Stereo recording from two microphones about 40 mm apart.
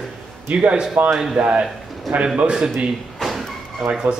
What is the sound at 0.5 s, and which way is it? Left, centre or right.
Speech, right.